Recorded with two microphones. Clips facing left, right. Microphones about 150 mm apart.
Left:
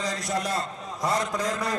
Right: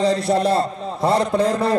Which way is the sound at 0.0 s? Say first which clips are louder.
Right 11 dB; 30° right (ahead or behind).